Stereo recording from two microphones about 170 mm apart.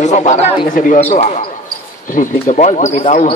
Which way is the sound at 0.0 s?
45° left (ahead or behind).